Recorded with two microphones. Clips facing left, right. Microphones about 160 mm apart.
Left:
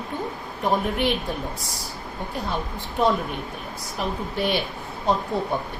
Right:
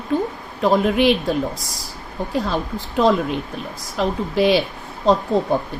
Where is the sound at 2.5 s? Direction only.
90° right.